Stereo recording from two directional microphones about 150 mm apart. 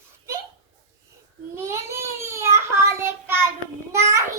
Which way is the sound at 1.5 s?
20° right (ahead or behind).